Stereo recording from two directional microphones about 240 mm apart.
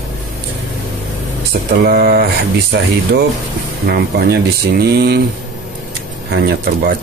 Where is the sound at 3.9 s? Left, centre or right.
Right.